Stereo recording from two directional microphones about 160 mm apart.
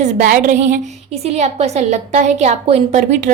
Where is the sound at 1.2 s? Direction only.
40° right (ahead or behind).